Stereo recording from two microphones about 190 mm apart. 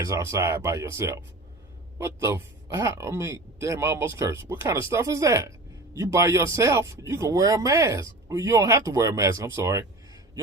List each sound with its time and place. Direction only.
0.0 s speech: 15° right (ahead or behind)